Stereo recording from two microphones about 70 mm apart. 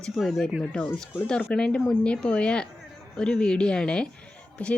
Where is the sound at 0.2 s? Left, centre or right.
Centre.